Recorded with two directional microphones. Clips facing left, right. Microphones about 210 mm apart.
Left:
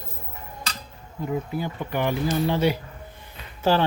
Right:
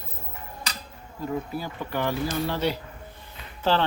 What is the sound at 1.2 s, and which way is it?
Speech, 20° left (ahead or behind).